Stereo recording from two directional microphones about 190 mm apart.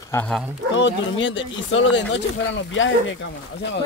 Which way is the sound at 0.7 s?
75° left (ahead or behind).